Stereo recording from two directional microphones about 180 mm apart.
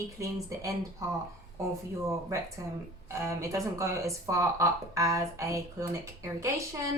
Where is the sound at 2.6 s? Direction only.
15° right (ahead or behind).